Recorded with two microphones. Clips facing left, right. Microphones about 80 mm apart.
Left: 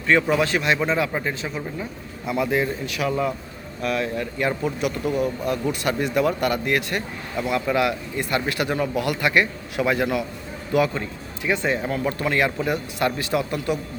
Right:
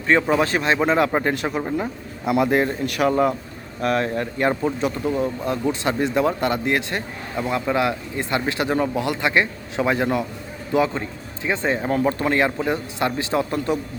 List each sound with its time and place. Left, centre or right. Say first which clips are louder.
0.1 s speech: right 1 dB; right
0.9 s a man's voice: right 5 dB; right
1.5 s a man's voice: right 6 dB; right